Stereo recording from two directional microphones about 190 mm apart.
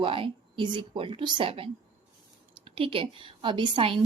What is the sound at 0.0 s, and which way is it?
A woman's voice, 25° right (ahead or behind).